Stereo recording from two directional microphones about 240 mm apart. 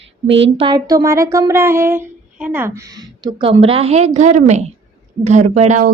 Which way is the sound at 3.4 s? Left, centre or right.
Right.